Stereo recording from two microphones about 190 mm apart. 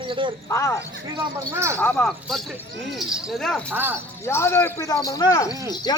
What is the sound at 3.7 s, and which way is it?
Speech, 10° right (ahead or behind).